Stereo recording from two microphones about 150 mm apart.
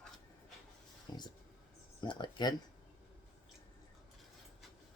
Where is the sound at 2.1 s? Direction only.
30° left (ahead or behind).